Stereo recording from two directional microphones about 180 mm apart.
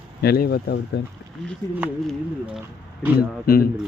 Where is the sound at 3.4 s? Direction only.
55° left (ahead or behind).